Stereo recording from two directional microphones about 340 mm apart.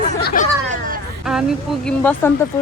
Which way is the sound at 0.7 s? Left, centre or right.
Right.